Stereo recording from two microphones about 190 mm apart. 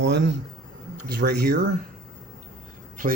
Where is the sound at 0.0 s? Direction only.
70° right (ahead or behind).